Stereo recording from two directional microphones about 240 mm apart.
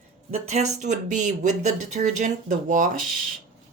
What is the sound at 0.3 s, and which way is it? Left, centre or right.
Speech, right.